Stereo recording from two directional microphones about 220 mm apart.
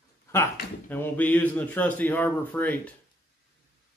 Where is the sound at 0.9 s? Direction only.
10° left (ahead or behind).